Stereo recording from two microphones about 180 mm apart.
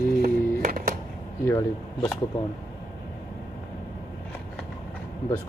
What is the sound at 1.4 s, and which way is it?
Speech, 20° left (ahead or behind).